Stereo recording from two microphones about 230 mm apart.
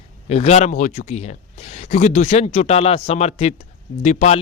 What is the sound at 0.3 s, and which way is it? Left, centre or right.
A man's voice, left.